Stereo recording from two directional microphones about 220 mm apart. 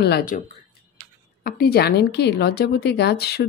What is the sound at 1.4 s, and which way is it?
A woman's voice, 45° left (ahead or behind).